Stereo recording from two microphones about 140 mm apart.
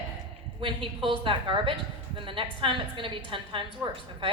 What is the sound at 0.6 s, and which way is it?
A woman's voice, 40° right (ahead or behind).